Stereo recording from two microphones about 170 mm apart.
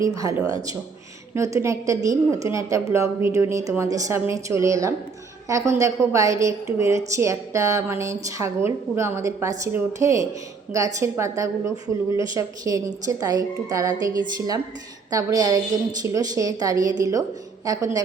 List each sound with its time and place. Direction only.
0.0 s speech: 20° right (ahead or behind)
1.4 s speech: 15° right (ahead or behind)